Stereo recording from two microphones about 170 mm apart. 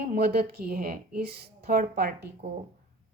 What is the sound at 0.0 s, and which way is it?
Speech, 65° right (ahead or behind).